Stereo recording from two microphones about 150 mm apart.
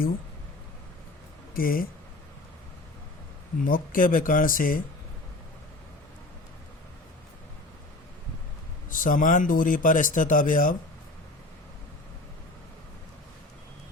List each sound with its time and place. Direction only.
1.5 s speech: 75° left (ahead or behind)
3.6 s speech: 65° left (ahead or behind)
8.9 s speech: 65° left (ahead or behind)